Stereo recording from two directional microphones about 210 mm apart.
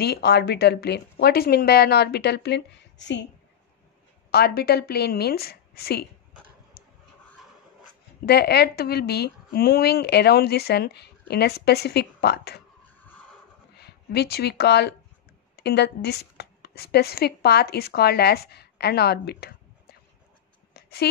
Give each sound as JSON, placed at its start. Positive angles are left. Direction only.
{"t": 0.0, "sound": "speech", "side_deg": 50}
{"t": 4.3, "sound": "speech", "side_deg": 50}
{"t": 8.3, "sound": "speech", "side_deg": 50}
{"t": 12.8, "sound": "skidding", "side_deg": 10}
{"t": 13.7, "sound": "speech", "side_deg": 50}
{"t": 20.7, "sound": "a sound", "side_deg": 50}